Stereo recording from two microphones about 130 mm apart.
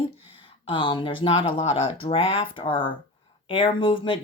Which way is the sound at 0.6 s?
40° left (ahead or behind).